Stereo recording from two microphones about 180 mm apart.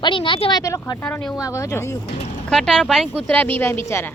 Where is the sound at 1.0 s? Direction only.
5° left (ahead or behind).